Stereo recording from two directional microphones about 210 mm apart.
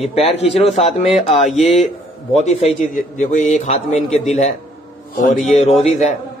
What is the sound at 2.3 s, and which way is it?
A man's voice, 30° left (ahead or behind).